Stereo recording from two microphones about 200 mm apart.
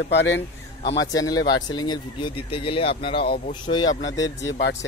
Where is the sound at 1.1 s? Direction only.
20° left (ahead or behind).